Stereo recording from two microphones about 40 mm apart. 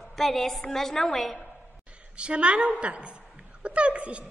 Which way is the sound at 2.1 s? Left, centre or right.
Right.